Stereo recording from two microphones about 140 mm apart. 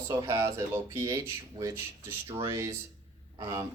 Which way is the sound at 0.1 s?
20° right (ahead or behind).